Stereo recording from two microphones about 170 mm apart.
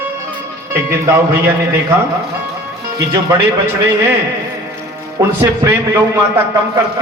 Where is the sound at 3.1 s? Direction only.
15° right (ahead or behind).